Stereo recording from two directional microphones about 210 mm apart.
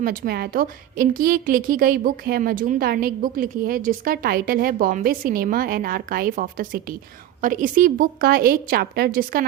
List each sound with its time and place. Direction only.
0.0 s a woman's voice: 45° right (ahead or behind)